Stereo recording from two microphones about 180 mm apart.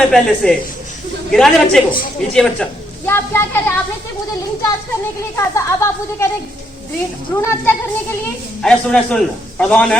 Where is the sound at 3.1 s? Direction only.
10° left (ahead or behind).